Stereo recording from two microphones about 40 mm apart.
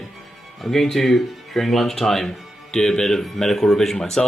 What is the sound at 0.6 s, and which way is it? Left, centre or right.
Speech, centre.